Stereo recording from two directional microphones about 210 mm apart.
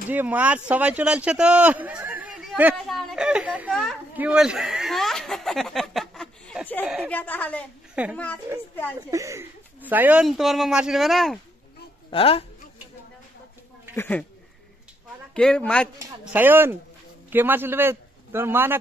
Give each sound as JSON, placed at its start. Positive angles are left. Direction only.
{"t": 0.1, "sound": "speech", "side_deg": -10}
{"t": 7.1, "sound": "a woman's voice", "side_deg": 10}
{"t": 7.9, "sound": "a woman's voice", "side_deg": -5}
{"t": 12.1, "sound": "a woman's voice", "side_deg": 25}
{"t": 13.9, "sound": "a woman's voice", "side_deg": 10}
{"t": 15.3, "sound": "speech", "side_deg": 5}
{"t": 16.0, "sound": "a man's voice", "side_deg": -10}